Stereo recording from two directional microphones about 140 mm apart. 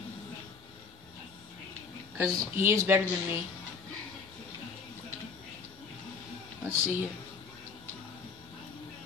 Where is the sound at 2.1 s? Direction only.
15° right (ahead or behind).